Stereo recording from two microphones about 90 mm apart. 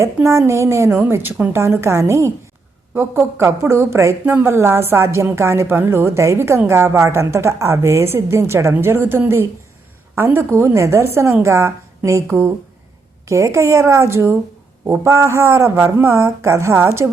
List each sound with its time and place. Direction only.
0.0 s a woman's voice: 30° right (ahead or behind)